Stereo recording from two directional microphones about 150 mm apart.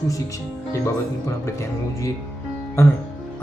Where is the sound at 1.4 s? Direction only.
20° left (ahead or behind).